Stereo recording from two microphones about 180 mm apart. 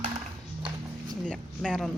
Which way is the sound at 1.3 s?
Centre (ahead or behind).